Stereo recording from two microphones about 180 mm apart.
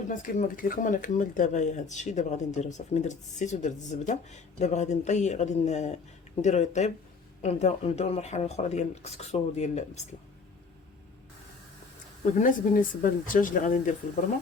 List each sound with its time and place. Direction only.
0.1 s speech: 45° left (ahead or behind)
12.4 s speech: 50° left (ahead or behind)